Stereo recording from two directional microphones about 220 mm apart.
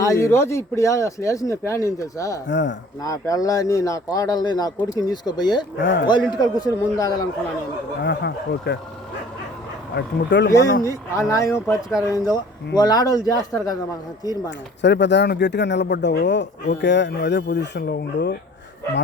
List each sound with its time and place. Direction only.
0.0 s speech: 15° left (ahead or behind)
2.5 s speech: 55° left (ahead or behind)
3.0 s speech: 15° left (ahead or behind)
5.7 s speech: 55° left (ahead or behind)
6.3 s speech: 20° left (ahead or behind)
8.0 s speech: 50° left (ahead or behind)
9.9 s speech: 50° left (ahead or behind)
10.8 s speech: 15° left (ahead or behind)
14.8 s speech: 50° left (ahead or behind)